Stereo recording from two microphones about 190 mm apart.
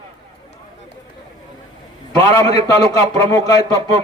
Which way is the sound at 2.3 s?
20° left (ahead or behind).